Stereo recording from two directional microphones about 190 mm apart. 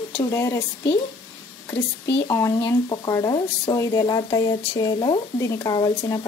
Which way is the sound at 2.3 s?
20° left (ahead or behind).